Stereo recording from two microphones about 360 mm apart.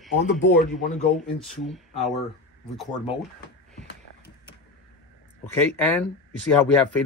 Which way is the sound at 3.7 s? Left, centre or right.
Right.